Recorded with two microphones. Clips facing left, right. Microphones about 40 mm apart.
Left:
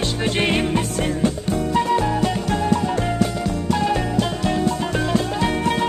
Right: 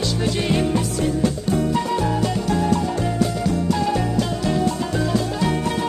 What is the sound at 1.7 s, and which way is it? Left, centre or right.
Music, left.